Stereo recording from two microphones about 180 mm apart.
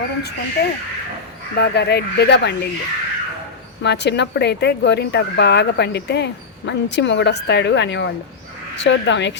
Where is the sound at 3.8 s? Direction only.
70° left (ahead or behind).